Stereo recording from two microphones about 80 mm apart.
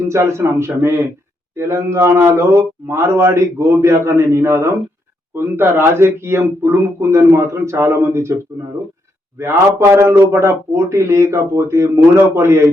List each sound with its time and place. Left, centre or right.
0.1 s a man's voice: right